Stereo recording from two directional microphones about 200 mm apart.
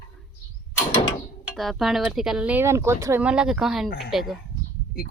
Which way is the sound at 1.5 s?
Centre (ahead or behind).